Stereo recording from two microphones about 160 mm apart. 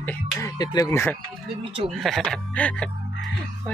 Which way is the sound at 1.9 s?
Centre (ahead or behind).